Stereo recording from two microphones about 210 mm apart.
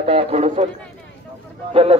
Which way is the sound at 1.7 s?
30° right (ahead or behind).